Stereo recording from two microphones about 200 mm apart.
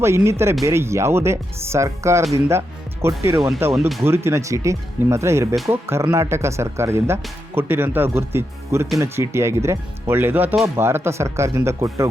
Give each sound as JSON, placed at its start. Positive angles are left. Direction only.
{"t": 0.0, "sound": "speech", "side_deg": -15}
{"t": 3.7, "sound": "speech", "side_deg": 0}
{"t": 4.0, "sound": "speech", "side_deg": -10}